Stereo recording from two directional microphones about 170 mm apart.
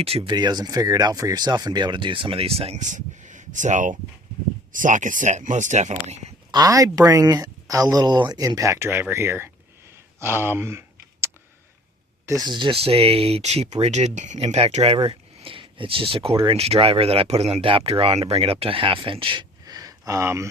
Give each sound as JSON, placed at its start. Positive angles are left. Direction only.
{"t": 0.0, "sound": "speech", "side_deg": -35}
{"t": 6.5, "sound": "speech", "side_deg": -20}
{"t": 10.2, "sound": "a sound", "side_deg": -15}
{"t": 12.2, "sound": "speech", "side_deg": -20}